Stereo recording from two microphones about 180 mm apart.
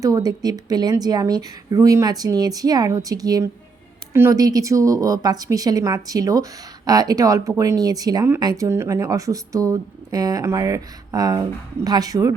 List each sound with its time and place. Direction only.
0.0 s a woman's voice: 20° right (ahead or behind)